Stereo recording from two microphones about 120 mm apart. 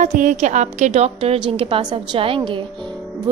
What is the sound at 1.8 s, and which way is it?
Speech, 40° right (ahead or behind).